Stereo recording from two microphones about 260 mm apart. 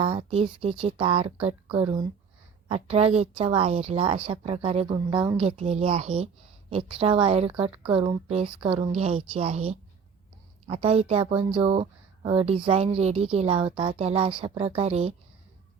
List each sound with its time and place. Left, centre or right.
0.0 s speech: right